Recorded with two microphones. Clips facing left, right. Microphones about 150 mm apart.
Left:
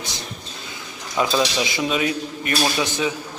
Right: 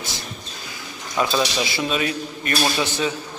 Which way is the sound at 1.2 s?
20° left (ahead or behind).